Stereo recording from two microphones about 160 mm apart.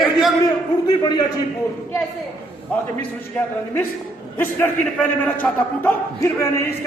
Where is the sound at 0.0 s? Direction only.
Centre (ahead or behind).